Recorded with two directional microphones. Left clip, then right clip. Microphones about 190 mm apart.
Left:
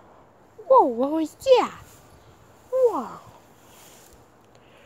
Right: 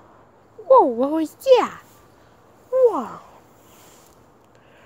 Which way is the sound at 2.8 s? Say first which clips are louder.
Right 4 dB; 20° right (ahead or behind).